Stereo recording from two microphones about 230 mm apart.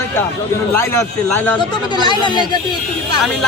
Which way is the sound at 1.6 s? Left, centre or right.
Centre.